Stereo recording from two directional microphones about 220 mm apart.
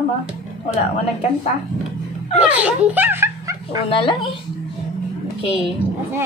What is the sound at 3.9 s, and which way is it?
Speech, 25° left (ahead or behind).